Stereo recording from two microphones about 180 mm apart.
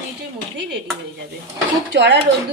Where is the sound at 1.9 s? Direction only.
70° right (ahead or behind).